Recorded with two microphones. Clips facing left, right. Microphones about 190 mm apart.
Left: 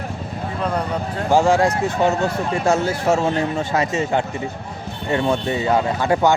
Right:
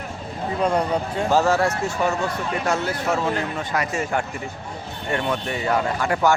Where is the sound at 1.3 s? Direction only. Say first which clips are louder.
Left 4 dB; 15° left (ahead or behind).